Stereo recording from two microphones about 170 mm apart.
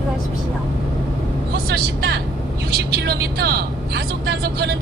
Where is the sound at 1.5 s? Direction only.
70° right (ahead or behind).